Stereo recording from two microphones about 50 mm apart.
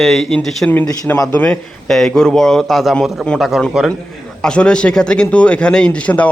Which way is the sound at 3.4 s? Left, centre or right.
Centre.